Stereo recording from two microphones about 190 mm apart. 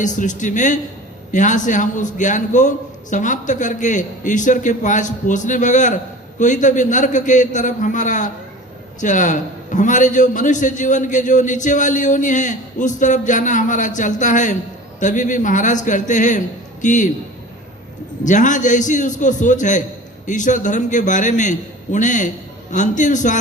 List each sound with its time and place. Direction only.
0.0 s a man's voice: 40° left (ahead or behind)
18.3 s a man's voice: 40° left (ahead or behind)